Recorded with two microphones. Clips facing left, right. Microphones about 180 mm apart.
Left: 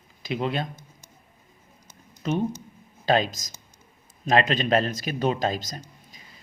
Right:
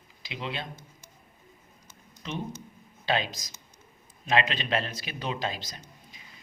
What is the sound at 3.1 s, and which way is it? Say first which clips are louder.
A man's voice: left 6 dB; 45° left (ahead or behind).